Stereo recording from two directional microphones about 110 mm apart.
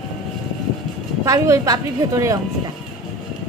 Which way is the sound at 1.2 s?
30° right (ahead or behind).